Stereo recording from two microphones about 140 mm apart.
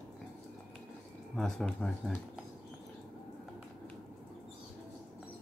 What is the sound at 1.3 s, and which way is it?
Speech, 5° left (ahead or behind).